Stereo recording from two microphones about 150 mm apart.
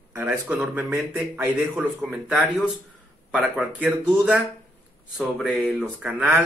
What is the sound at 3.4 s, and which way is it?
Speech, 10° right (ahead or behind).